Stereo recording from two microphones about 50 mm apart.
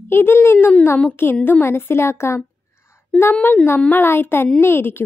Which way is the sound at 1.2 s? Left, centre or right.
Left.